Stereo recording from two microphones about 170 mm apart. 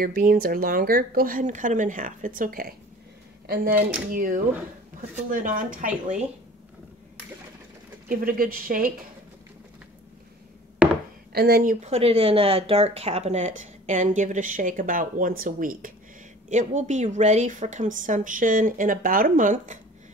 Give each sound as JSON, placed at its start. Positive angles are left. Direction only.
{"t": 0.0, "sound": "speech", "side_deg": -55}
{"t": 3.4, "sound": "speech", "side_deg": -65}
{"t": 4.1, "sound": "speech", "side_deg": -50}
{"t": 8.1, "sound": "speech", "side_deg": -60}
{"t": 10.8, "sound": "a sound", "side_deg": -10}
{"t": 11.3, "sound": "speech", "side_deg": -65}